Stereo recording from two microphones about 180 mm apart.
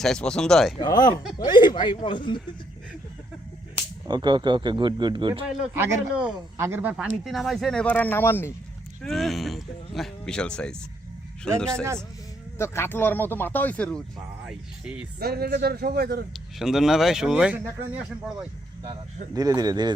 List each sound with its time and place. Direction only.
0.0 s speech: 5° left (ahead or behind)
0.8 s speech: 20° left (ahead or behind)
4.0 s speech: 25° right (ahead or behind)
5.7 s speech: 10° right (ahead or behind); by 8.5 s 10° left (ahead or behind)
9.0 s speech: centre (ahead or behind)
12.5 s speech: 15° left (ahead or behind)
14.4 s speech: 5° right (ahead or behind)
15.2 s speech: 60° right (ahead or behind)
16.6 s speech: centre (ahead or behind)
19.3 s speech: 20° right (ahead or behind)